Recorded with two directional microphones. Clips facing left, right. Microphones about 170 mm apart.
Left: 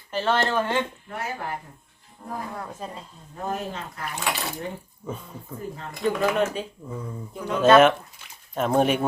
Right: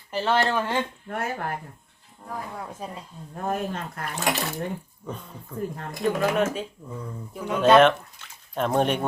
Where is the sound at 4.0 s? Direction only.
55° right (ahead or behind).